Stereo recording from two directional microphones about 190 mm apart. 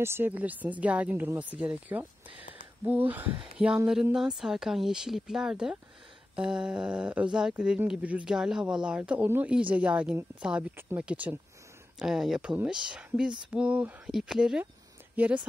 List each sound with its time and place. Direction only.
0.0 s speech: 10° right (ahead or behind)